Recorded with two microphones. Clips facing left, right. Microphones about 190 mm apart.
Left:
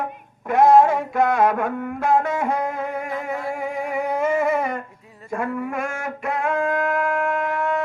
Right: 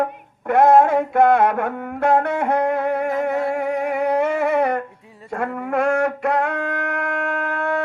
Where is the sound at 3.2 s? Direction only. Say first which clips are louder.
Right 6 dB; 70° right (ahead or behind).